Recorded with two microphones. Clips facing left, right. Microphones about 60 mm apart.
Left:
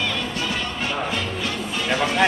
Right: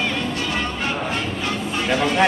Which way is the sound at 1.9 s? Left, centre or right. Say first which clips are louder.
Right 2 dB; centre.